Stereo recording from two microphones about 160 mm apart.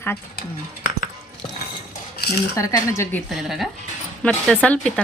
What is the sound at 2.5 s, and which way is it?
Speech, 20° left (ahead or behind).